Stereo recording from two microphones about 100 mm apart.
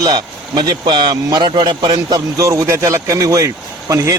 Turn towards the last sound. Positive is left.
turn(degrees=-35)  # may be behind; listen again after turning